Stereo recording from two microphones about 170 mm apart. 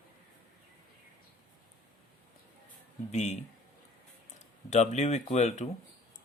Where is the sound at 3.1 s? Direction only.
45° left (ahead or behind).